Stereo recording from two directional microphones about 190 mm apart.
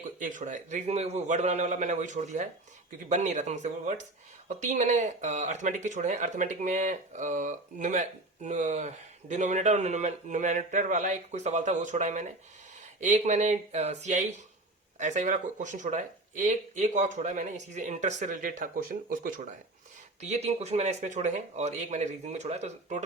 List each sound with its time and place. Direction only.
0.2 s speech: 40° right (ahead or behind)
20.2 s speech: 35° right (ahead or behind)